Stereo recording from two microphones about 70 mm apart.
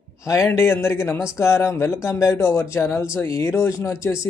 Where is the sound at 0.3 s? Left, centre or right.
Left.